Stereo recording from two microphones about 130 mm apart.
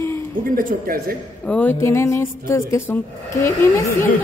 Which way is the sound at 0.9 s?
90° right.